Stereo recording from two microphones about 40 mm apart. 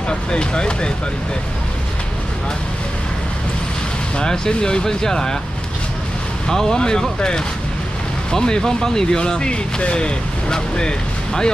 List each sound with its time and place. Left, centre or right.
0.3 s speech: left
4.2 s speech: left
6.4 s speech: centre